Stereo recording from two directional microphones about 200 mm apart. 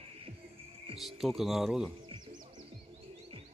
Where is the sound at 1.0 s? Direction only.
Centre (ahead or behind).